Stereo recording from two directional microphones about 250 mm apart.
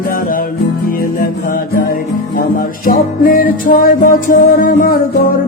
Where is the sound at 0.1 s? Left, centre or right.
Left.